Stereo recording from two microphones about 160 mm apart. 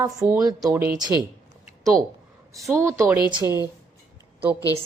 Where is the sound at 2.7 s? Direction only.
15° right (ahead or behind).